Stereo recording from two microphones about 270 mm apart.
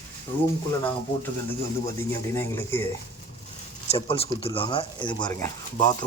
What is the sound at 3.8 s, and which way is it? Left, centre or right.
Speech, left.